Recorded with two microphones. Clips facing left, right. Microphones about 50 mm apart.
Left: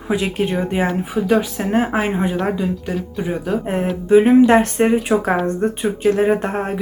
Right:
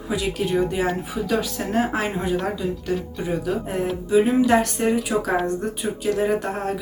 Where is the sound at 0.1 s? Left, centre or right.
Left.